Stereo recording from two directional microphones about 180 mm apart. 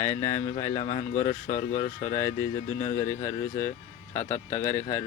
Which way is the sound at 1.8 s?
15° left (ahead or behind).